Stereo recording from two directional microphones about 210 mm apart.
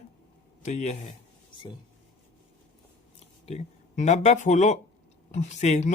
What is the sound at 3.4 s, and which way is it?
Speech, 30° left (ahead or behind).